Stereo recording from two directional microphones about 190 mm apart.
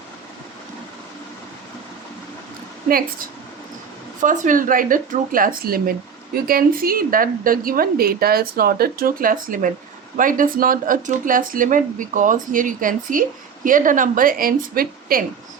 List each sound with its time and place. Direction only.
4.2 s a woman's voice: 45° right (ahead or behind)